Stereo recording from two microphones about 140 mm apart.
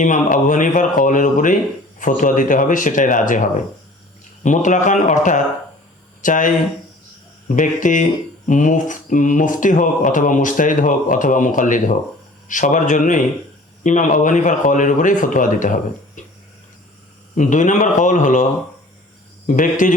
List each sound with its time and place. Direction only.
0.0 s speech: 65° left (ahead or behind)
4.4 s a man's voice: 65° left (ahead or behind)
17.3 s a man's voice: 65° left (ahead or behind)
19.5 s speech: 70° left (ahead or behind)